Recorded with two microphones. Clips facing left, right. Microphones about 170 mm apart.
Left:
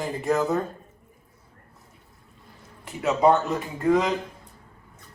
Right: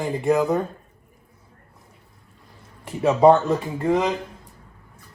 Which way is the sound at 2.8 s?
30° right (ahead or behind).